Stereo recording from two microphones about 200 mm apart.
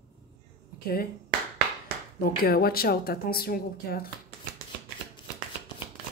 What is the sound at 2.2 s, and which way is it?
A woman's voice, 50° left (ahead or behind).